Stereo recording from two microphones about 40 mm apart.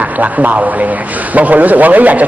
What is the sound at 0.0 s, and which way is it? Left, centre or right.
A man's voice, right.